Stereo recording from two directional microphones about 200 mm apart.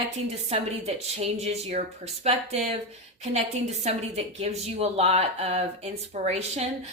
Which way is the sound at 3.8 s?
35° right (ahead or behind).